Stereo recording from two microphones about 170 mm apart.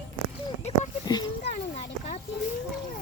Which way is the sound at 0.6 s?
40° left (ahead or behind).